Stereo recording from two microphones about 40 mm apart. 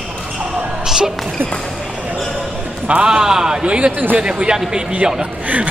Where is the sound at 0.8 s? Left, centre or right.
Centre.